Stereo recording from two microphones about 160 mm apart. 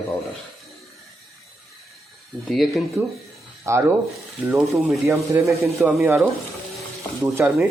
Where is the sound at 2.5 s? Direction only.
Centre (ahead or behind).